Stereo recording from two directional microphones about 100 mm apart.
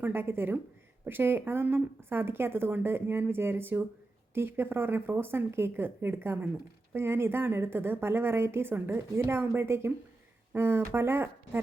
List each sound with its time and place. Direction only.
0.0 s speech: 20° right (ahead or behind)